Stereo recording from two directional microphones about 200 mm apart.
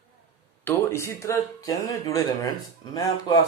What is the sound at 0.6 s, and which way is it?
Speech, 10° left (ahead or behind).